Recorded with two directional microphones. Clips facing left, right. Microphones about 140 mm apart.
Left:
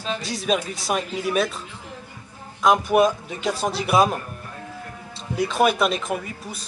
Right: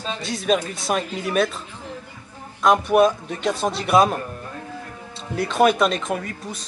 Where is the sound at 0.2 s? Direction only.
Centre (ahead or behind).